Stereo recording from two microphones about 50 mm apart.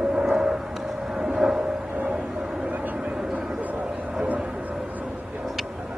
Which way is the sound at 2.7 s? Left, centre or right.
Right.